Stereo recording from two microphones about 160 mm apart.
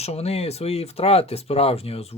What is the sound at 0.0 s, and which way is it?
Speech, 40° left (ahead or behind).